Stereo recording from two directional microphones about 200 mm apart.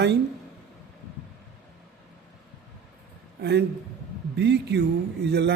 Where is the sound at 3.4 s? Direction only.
55° right (ahead or behind).